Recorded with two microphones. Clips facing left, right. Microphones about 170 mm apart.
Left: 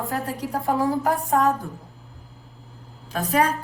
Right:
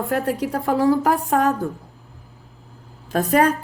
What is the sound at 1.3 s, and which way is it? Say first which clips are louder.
Speech: even; 70° right (ahead or behind).